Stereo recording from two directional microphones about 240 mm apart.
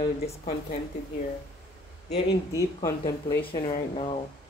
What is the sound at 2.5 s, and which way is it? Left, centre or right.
Speech, centre.